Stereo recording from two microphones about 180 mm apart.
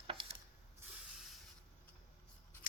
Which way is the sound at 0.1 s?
30° right (ahead or behind).